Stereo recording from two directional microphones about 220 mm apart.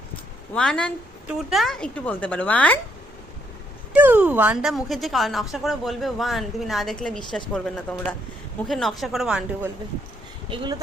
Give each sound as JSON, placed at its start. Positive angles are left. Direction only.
{"t": 0.5, "sound": "a woman's voice", "side_deg": 5}
{"t": 3.9, "sound": "a woman's voice", "side_deg": -10}
{"t": 10.5, "sound": "speech", "side_deg": -20}